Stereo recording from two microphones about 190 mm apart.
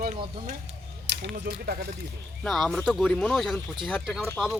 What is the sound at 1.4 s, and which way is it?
Speech, 55° right (ahead or behind).